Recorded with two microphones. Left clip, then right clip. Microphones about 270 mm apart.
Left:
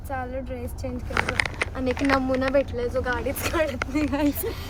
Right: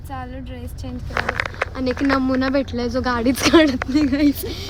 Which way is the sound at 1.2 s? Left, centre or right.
Left.